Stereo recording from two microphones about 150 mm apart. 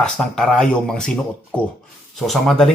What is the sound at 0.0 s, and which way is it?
Speech, 5° left (ahead or behind).